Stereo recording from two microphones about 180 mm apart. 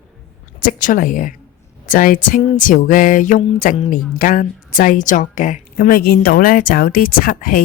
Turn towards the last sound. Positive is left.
turn(degrees=50)  # may be behind; listen again after turning